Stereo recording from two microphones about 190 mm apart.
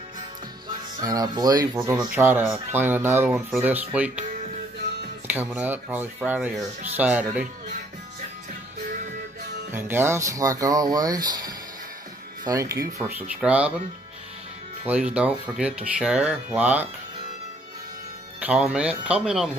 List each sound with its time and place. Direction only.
1.0 s speech: 20° right (ahead or behind)
5.2 s speech: 10° right (ahead or behind)
9.7 s speech: 10° right (ahead or behind)
14.9 s speech: 5° right (ahead or behind)
18.4 s speech: 5° right (ahead or behind)